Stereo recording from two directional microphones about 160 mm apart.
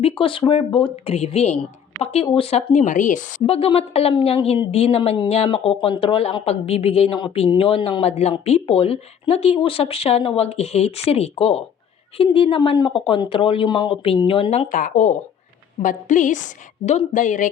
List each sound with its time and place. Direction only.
0.0 s speech: 35° left (ahead or behind); by 3.4 s 50° left (ahead or behind)
3.4 s speech: 40° left (ahead or behind)
14.7 s a woman's voice: 55° left (ahead or behind)